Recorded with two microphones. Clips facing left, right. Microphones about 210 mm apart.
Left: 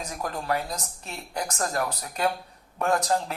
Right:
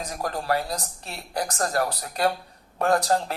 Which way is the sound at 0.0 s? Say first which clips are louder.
Right 2 dB; 35° right (ahead or behind).